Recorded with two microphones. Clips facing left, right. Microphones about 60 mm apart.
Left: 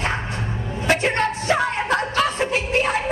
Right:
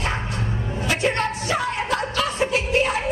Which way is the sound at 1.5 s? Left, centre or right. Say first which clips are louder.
Left 3 dB; left.